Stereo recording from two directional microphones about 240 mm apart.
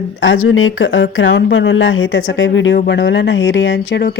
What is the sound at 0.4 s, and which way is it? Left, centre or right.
Speech, left.